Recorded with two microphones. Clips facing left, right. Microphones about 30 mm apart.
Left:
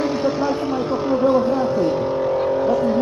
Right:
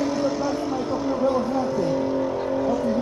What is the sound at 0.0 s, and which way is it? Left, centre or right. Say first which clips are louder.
Vehicle: left 3 dB; left.